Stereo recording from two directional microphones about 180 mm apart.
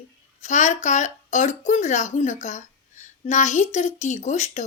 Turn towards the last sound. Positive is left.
turn(degrees=40)  # may be behind; listen again after turning